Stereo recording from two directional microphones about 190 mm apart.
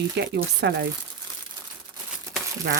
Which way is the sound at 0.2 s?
65° right (ahead or behind).